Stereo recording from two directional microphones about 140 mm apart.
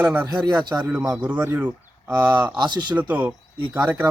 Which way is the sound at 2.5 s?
30° right (ahead or behind).